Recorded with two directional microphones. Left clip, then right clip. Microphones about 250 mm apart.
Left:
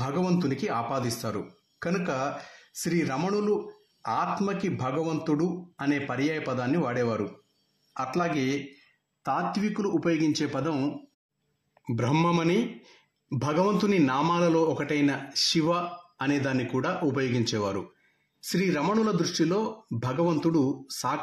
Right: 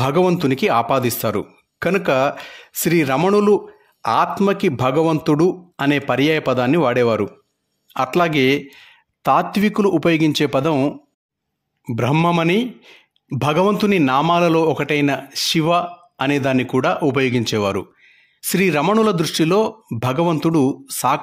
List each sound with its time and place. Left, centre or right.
0.0 s speech: right